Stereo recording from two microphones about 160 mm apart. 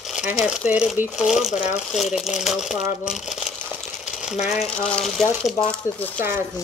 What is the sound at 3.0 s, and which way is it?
Crumpling, 5° right (ahead or behind).